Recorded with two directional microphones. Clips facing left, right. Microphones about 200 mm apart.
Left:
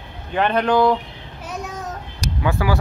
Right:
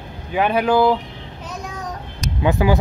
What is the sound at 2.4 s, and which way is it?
Speech, 20° right (ahead or behind).